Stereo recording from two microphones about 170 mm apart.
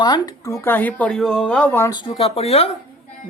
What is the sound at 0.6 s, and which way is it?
Speech, 10° left (ahead or behind).